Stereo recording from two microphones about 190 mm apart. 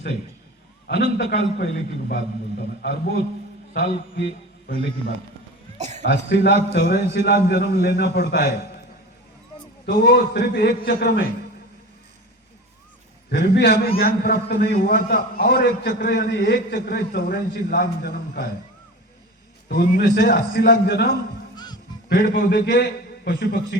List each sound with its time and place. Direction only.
1.5 s a man's voice: 55° left (ahead or behind)
5.7 s cough: 35° right (ahead or behind)
6.2 s a man's voice: 65° left (ahead or behind)
9.8 s a man's voice: 55° left (ahead or behind)
13.3 s a man's voice: 60° left (ahead or behind)
19.6 s a man's voice: 50° left (ahead or behind)
21.5 s music: 20° left (ahead or behind)
22.1 s a man's voice: 55° left (ahead or behind)